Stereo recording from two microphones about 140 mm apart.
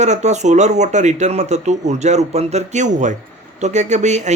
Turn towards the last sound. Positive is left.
turn(degrees=-55)  # may be behind; listen again after turning